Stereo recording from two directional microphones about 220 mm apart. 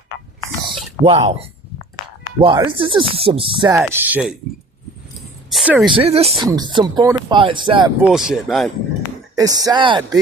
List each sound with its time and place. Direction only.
0.7 s a sound: 25° right (ahead or behind)
2.4 s speech: 20° right (ahead or behind); by 4.4 s 5° right (ahead or behind)
5.5 s a sound: 5° right (ahead or behind)
5.8 s speech: 25° right (ahead or behind)
8.0 s speech: centre (ahead or behind)
9.3 s speech: 15° right (ahead or behind)